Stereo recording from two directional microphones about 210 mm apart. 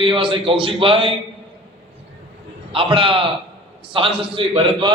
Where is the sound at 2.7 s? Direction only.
25° right (ahead or behind).